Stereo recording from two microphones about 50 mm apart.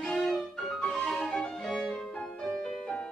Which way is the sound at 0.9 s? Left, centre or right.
Centre.